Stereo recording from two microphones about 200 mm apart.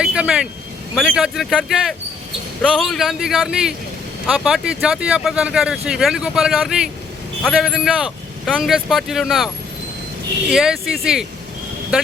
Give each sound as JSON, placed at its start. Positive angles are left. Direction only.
{"t": 0.0, "sound": "speech", "side_deg": -5}
{"t": 10.5, "sound": "speech", "side_deg": 0}